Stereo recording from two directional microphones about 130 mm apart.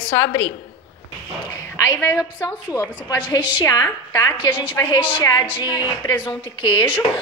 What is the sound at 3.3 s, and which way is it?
Speech, 35° left (ahead or behind).